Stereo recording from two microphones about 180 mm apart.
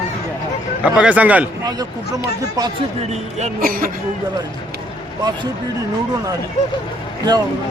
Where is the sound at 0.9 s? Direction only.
5° right (ahead or behind).